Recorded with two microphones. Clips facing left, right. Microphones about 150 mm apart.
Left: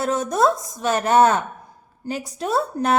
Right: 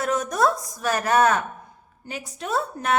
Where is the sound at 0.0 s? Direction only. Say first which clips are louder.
Left 3 dB; 30° left (ahead or behind).